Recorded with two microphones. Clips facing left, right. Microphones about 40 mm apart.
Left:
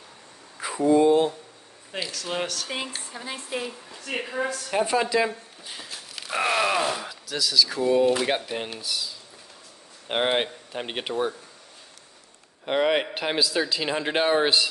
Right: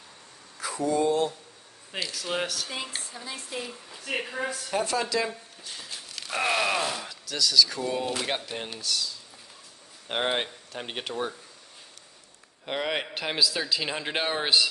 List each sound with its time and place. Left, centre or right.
0.6 s speech: left
2.1 s a man's voice: centre
3.0 s a sound: left
3.9 s a man's voice: centre
4.6 s speech: centre
12.6 s a man's voice: centre